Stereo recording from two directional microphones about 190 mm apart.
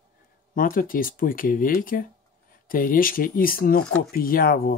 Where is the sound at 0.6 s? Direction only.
45° left (ahead or behind).